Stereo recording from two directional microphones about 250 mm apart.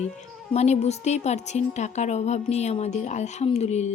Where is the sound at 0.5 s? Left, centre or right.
Left.